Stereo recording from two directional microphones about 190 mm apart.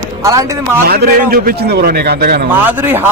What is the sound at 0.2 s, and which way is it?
Speech, 15° right (ahead or behind).